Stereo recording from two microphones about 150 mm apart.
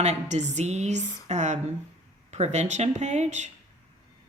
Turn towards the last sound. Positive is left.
turn(degrees=-50)  # may be behind; listen again after turning